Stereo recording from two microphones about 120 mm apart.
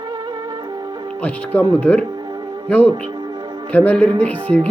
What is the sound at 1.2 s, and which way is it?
Speech, 10° left (ahead or behind).